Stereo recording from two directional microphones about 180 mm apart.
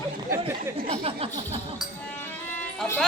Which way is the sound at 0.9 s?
35° right (ahead or behind).